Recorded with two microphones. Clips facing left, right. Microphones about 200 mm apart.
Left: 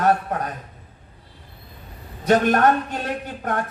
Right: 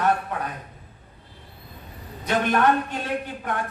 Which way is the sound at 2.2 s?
40° left (ahead or behind).